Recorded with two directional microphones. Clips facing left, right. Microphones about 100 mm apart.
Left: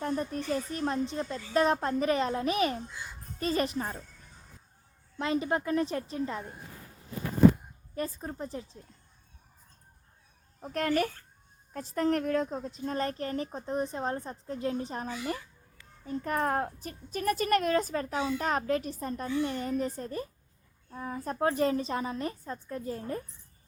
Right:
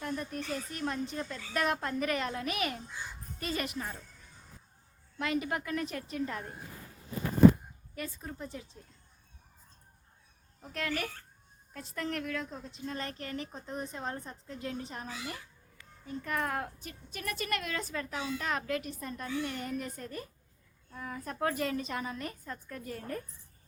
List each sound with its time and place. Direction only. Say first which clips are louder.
0.0 s speech: left 5 dB; 35° left (ahead or behind)
5.1 s a woman's voice: left 4 dB; 30° left (ahead or behind)
7.9 s speech: left 6 dB; 35° left (ahead or behind)
10.6 s a child's voice: left 7 dB; 45° left (ahead or behind); by 23.2 s 25° left (ahead or behind)